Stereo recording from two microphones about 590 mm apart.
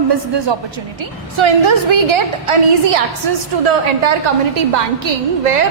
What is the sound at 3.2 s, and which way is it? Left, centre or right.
Speech, right.